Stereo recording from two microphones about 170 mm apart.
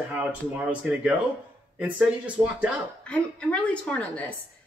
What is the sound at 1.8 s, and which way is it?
Speech, 5° right (ahead or behind).